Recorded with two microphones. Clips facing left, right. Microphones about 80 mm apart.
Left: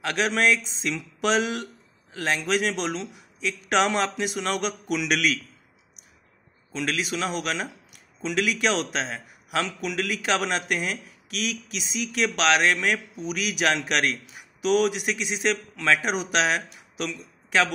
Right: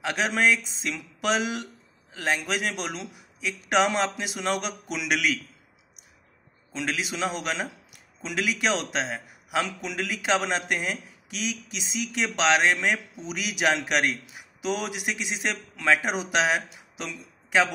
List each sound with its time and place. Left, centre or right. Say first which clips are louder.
0.0 s a man's voice: left 1 dB; centre
6.7 s a man's voice: left 2 dB; centre